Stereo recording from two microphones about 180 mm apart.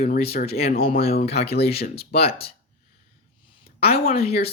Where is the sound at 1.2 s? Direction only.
65° left (ahead or behind).